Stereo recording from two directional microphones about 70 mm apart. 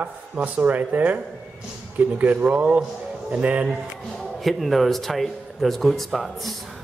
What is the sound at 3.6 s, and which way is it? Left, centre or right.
Speech, centre.